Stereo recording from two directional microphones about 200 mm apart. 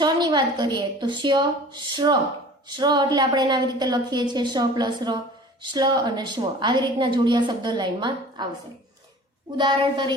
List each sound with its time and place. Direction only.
0.0 s a woman's voice: 20° right (ahead or behind)
9.6 s a woman's voice: 25° right (ahead or behind)